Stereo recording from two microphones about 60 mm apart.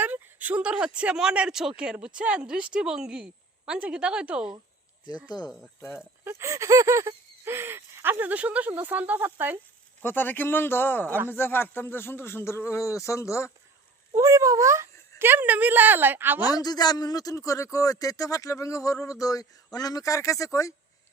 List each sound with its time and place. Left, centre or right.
0.0 s speech: right; by 4.5 s centre
5.5 s speech: centre
6.2 s a sound: right
10.0 s speech: left
12.8 s speech: left
14.1 s speech: right
15.2 s a woman's voice: right
16.5 s a man's voice: left
19.2 s speech: left